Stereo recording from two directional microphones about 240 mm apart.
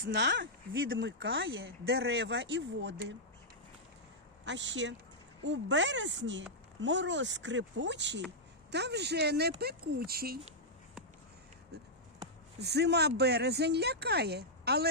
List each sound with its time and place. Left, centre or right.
0.0 s speech: right
4.4 s speech: right
11.7 s a sound: right
12.5 s speech: right